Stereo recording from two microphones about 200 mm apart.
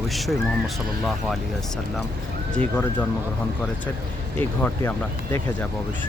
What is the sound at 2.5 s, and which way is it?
Speech, 5° left (ahead or behind).